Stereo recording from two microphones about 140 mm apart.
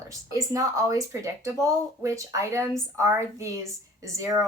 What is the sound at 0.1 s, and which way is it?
A woman's voice, 25° right (ahead or behind).